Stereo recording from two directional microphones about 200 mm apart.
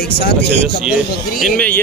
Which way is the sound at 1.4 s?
5° left (ahead or behind).